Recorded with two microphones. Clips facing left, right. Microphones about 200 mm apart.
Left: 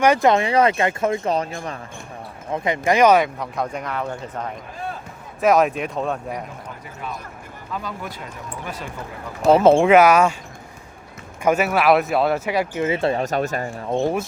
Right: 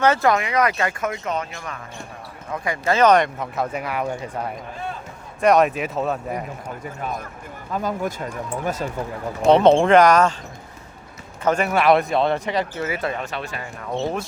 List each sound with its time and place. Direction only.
0.0 s speech: 15° left (ahead or behind)
0.3 s speech: 30° left (ahead or behind)
2.5 s speech: 20° left (ahead or behind)
3.3 s speech: 5° right (ahead or behind)
5.4 s speech: centre (ahead or behind)
7.7 s speech: 45° right (ahead or behind)
9.5 s speech: 5° left (ahead or behind)
11.4 s speech: 5° left (ahead or behind); by 13.7 s 45° left (ahead or behind)
14.0 s speech: 10° left (ahead or behind)